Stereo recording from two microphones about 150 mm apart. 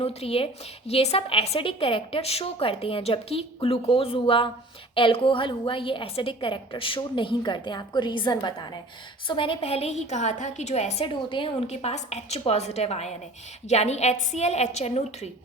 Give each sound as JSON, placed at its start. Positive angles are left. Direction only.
{"t": 0.0, "sound": "a woman's voice", "side_deg": 40}